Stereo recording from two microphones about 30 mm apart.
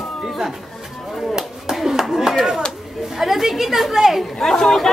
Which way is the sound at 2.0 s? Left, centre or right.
Centre.